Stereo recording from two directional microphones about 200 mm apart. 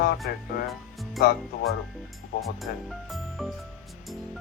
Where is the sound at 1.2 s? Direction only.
50° left (ahead or behind).